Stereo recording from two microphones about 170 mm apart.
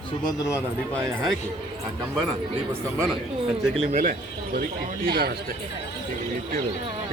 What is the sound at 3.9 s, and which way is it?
A man's voice, 55° right (ahead or behind).